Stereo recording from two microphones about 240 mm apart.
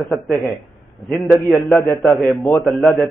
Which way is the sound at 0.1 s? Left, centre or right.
Centre.